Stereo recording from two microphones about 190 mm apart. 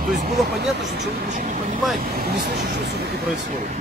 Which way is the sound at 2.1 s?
55° right (ahead or behind).